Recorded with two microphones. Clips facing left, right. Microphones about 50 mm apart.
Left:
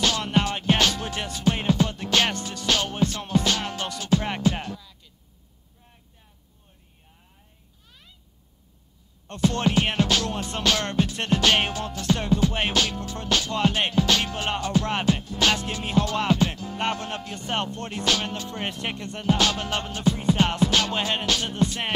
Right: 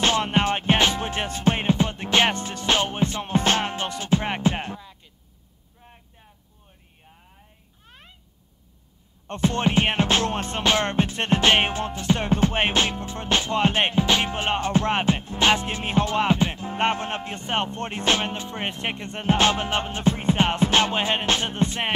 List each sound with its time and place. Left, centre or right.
0.0 s music: right
5.8 s a sound: right
7.8 s a sound: right
9.3 s music: right
10.6 s music: right
12.3 s music: right